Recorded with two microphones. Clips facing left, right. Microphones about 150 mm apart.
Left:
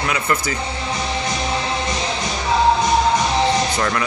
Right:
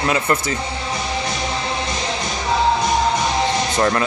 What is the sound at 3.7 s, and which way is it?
Speech, 25° right (ahead or behind).